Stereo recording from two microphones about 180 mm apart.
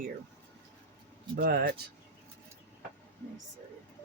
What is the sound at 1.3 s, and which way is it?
Speech, 55° right (ahead or behind).